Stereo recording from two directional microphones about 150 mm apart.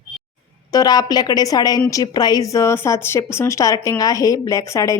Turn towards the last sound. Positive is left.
turn(degrees=20)  # may be behind; listen again after turning